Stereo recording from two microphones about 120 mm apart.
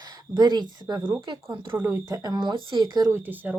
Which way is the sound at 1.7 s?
15° right (ahead or behind).